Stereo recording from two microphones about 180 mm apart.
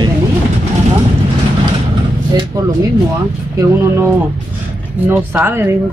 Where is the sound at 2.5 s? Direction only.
20° right (ahead or behind).